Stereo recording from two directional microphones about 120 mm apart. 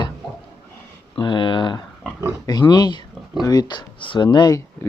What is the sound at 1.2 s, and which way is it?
Speech, 40° left (ahead or behind).